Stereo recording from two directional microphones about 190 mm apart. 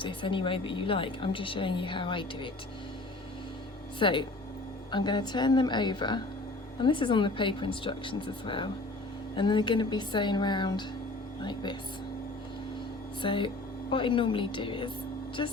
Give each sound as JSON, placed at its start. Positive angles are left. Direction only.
{"t": 0.0, "sound": "a woman's voice", "side_deg": 25}
{"t": 4.0, "sound": "a woman's voice", "side_deg": 25}
{"t": 13.2, "sound": "a woman's voice", "side_deg": 25}